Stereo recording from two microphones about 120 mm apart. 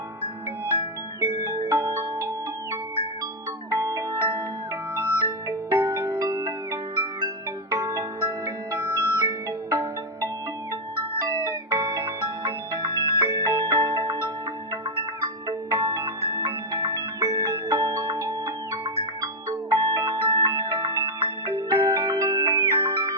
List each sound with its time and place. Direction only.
1.2 s music: 25° right (ahead or behind)
3.7 s glockenspiel: 25° right (ahead or behind)
4.9 s music: 25° right (ahead or behind)
11.3 s music: 30° right (ahead or behind)
15.4 s music: 30° right (ahead or behind)